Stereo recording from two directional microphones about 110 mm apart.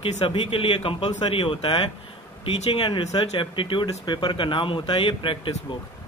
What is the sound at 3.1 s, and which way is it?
Speech, 45° left (ahead or behind).